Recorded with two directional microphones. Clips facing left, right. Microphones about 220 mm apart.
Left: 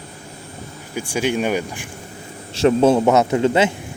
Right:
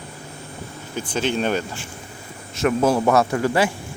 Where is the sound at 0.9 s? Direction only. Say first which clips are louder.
Left 2 dB; 10° left (ahead or behind).